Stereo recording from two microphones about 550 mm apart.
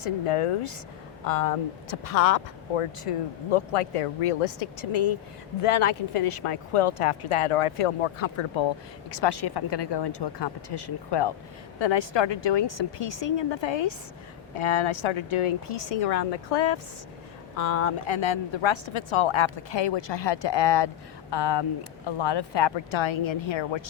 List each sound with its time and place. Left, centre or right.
0.0 s speech: left
1.2 s speech: left
9.0 s speech: left
17.6 s speech: left